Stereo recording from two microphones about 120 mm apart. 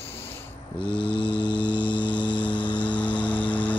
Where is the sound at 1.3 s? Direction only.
40° left (ahead or behind).